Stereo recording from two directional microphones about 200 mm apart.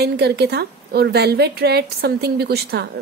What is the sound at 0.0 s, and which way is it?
A woman's voice, 55° right (ahead or behind).